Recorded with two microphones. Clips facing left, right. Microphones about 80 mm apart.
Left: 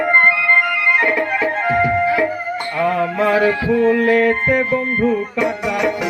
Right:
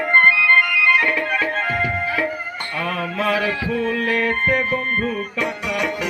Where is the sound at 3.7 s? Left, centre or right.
Centre.